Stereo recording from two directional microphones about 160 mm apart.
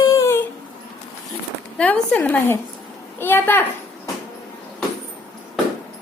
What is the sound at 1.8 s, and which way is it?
A woman's voice, 10° left (ahead or behind).